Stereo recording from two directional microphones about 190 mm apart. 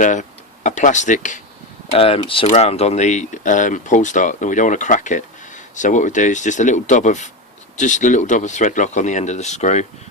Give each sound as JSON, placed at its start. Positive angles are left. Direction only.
{"t": 0.0, "sound": "speech", "side_deg": 40}
{"t": 1.9, "sound": "speech", "side_deg": 30}